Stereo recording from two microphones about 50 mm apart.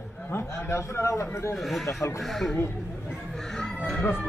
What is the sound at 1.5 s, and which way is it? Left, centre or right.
Speech, centre.